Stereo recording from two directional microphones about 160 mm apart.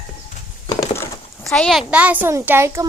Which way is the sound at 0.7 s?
25° left (ahead or behind).